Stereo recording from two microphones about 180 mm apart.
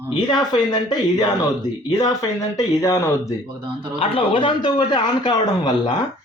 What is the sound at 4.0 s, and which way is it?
A man's voice, 30° left (ahead or behind).